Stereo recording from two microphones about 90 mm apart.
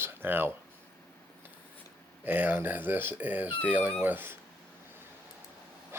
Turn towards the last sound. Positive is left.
turn(degrees=-20)  # may be behind; listen again after turning